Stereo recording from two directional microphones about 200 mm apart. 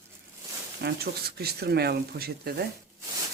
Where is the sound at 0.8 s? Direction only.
50° right (ahead or behind).